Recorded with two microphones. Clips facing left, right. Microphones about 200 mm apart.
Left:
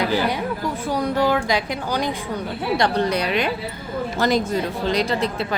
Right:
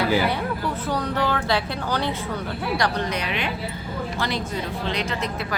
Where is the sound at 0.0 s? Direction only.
15° left (ahead or behind).